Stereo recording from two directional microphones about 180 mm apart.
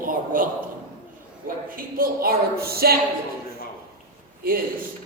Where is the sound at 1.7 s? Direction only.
55° right (ahead or behind).